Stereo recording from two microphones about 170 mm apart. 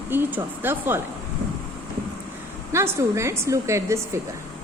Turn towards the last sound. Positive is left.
turn(degrees=-15)  # may be behind; listen again after turning